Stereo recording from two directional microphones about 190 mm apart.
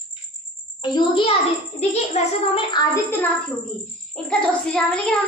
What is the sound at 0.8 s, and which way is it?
A child's voice, 25° left (ahead or behind).